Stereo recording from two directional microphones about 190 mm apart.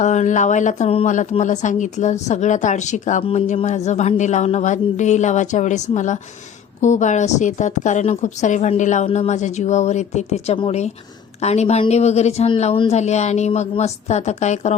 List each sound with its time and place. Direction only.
0.0 s a woman's voice: 40° left (ahead or behind)